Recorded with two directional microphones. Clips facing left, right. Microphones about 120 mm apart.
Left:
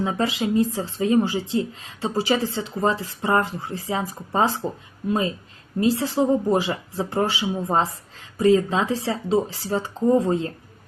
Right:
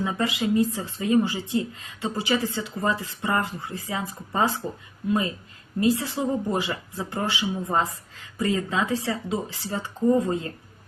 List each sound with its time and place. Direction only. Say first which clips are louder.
0.2 s speech: left 1 dB; 30° left (ahead or behind)
5.8 s speech: left 3 dB; 30° left (ahead or behind)